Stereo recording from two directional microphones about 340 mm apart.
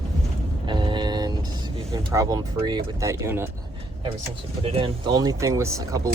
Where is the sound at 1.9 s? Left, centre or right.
Centre.